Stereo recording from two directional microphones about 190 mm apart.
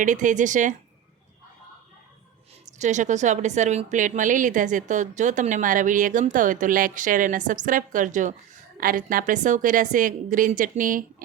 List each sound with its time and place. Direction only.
0.0 s a woman's voice: 40° right (ahead or behind)
2.7 s a woman's voice: 40° right (ahead or behind)